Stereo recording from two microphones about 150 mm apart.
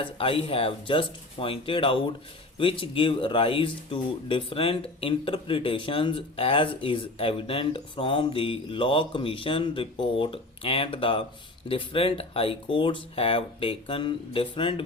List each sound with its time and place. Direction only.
0.0 s speech: 40° left (ahead or behind)